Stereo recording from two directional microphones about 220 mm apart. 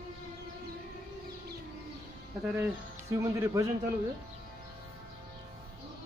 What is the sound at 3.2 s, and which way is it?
Speech, 10° right (ahead or behind).